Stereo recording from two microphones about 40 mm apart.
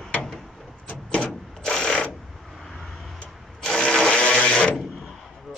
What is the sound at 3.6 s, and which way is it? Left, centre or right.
Ratchet, centre.